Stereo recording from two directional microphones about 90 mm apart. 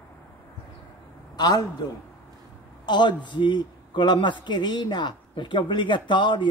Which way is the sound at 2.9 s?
55° left (ahead or behind).